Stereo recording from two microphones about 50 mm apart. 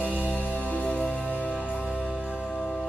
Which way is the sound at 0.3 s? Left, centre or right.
Left.